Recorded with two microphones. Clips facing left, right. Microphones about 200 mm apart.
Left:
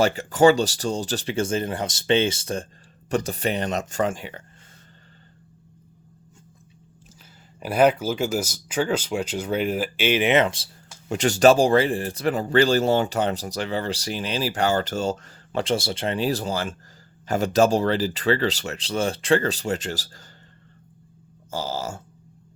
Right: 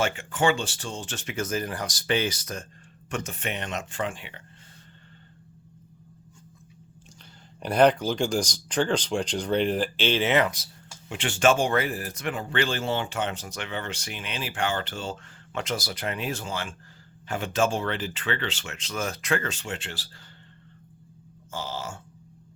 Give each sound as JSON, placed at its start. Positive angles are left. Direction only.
{"t": 0.0, "sound": "speech", "side_deg": 40}
{"t": 7.6, "sound": "speech", "side_deg": 5}
{"t": 11.1, "sound": "speech", "side_deg": 40}
{"t": 21.5, "sound": "speech", "side_deg": 40}